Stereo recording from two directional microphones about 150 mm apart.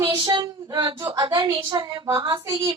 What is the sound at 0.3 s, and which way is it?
A woman's voice, 30° right (ahead or behind).